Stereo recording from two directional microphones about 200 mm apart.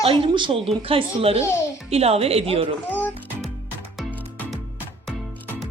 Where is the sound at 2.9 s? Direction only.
10° left (ahead or behind).